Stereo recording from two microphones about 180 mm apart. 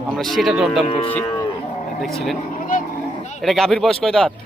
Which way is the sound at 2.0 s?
Centre (ahead or behind).